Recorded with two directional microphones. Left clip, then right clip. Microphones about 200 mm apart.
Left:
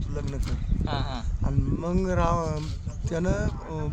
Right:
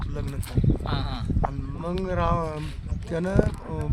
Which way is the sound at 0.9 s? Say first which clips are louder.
Even; 35° left (ahead or behind).